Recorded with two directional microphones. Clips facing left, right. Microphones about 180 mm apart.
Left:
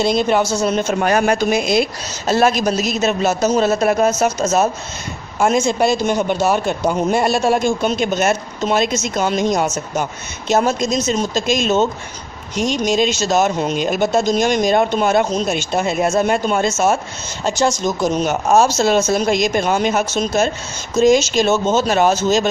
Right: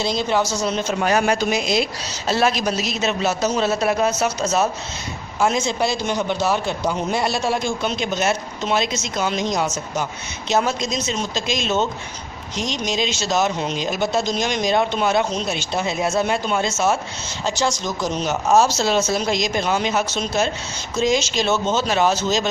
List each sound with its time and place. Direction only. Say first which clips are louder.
0.0 s speech: left 5 dB; 55° left (ahead or behind)